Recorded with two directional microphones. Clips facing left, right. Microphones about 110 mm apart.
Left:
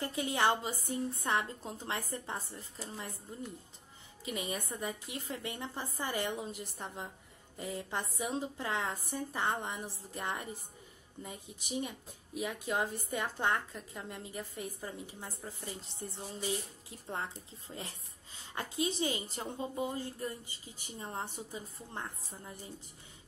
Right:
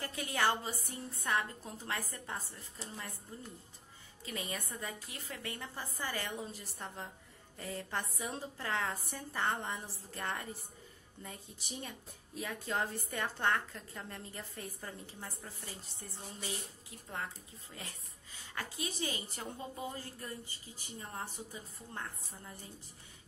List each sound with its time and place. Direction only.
0.0 s a woman's voice: 20° left (ahead or behind)
12.4 s a woman's voice: 15° left (ahead or behind)